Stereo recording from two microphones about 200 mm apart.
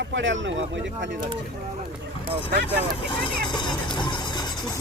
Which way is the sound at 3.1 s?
25° left (ahead or behind).